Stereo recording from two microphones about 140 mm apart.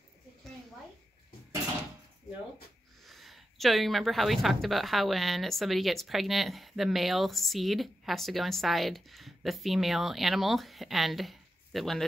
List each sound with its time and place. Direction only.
3.1 s speech: centre (ahead or behind)